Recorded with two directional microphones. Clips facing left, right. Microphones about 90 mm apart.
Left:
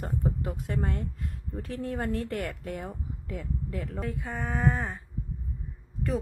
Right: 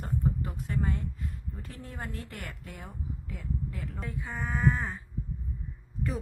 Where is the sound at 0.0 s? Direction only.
60° left (ahead or behind).